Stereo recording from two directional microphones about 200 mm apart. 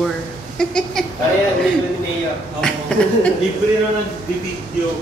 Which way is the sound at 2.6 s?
5° left (ahead or behind).